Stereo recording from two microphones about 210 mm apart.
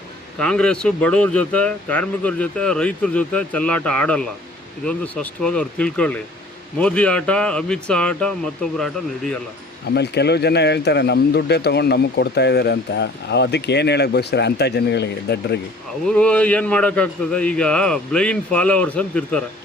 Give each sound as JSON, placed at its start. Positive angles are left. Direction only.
{"t": 0.3, "sound": "speech", "side_deg": 5}
{"t": 9.9, "sound": "speech", "side_deg": 50}
{"t": 16.0, "sound": "speech", "side_deg": 5}